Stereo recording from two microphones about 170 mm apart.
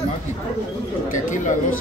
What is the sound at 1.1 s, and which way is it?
Speech, 50° left (ahead or behind).